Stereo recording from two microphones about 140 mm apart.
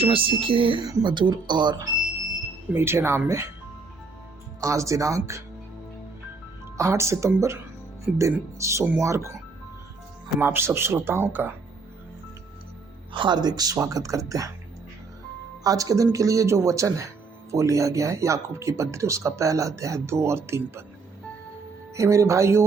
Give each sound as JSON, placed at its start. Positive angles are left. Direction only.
{"t": 0.0, "sound": "speech", "side_deg": -40}
{"t": 2.7, "sound": "speech", "side_deg": -15}
{"t": 4.6, "sound": "speech", "side_deg": -20}
{"t": 6.7, "sound": "speech", "side_deg": -20}
{"t": 10.4, "sound": "speech", "side_deg": -15}
{"t": 13.1, "sound": "speech", "side_deg": -35}
{"t": 15.6, "sound": "speech", "side_deg": -25}
{"t": 21.9, "sound": "speech", "side_deg": -20}